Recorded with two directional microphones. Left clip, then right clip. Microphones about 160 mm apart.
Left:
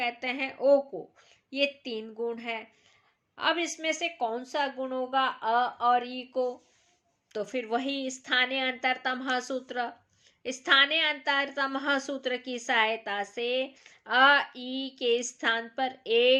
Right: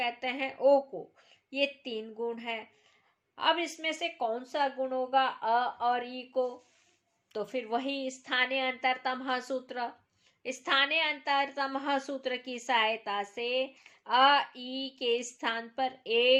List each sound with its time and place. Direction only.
0.0 s a woman's voice: 10° left (ahead or behind)